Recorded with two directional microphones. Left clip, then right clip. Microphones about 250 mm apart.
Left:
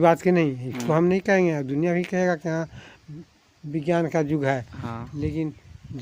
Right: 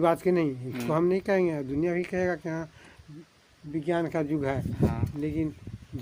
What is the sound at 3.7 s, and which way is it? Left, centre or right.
Speech, left.